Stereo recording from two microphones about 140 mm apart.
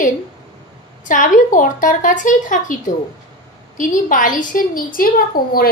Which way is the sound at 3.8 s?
70° left (ahead or behind).